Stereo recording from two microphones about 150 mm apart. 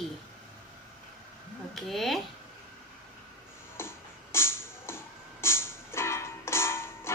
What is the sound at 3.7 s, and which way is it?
Music, 15° left (ahead or behind).